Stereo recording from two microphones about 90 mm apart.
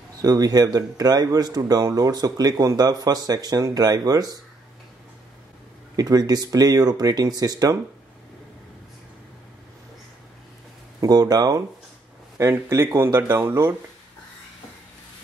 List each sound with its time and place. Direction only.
0.2 s speech: 45° right (ahead or behind)
5.9 s speech: 45° right (ahead or behind)
11.0 s speech: 45° right (ahead or behind)
12.4 s speech: 30° right (ahead or behind)